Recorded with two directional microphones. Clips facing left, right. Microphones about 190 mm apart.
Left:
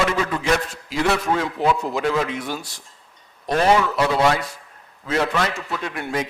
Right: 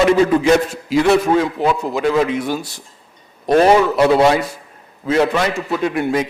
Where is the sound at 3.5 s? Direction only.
40° right (ahead or behind).